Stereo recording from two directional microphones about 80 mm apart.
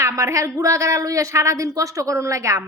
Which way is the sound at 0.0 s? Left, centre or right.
Right.